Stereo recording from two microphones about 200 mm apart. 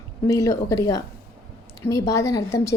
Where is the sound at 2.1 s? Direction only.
15° left (ahead or behind).